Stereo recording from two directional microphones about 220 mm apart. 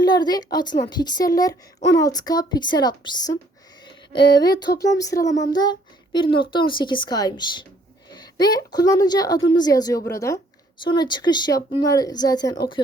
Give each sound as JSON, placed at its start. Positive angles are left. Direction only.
{"t": 0.0, "sound": "a woman's voice", "side_deg": 20}